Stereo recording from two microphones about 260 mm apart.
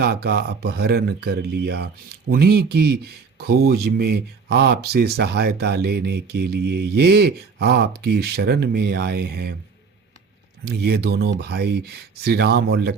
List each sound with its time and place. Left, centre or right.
0.0 s speech: right
10.7 s speech: right